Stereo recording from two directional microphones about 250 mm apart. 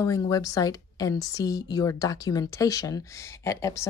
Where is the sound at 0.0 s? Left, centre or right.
Centre.